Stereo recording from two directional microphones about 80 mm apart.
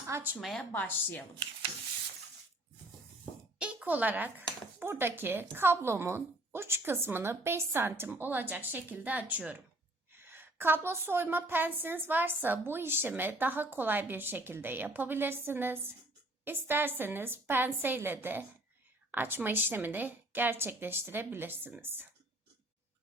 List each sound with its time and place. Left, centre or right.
0.1 s speech: right
0.6 s a woman's voice: left
3.6 s a woman's voice: centre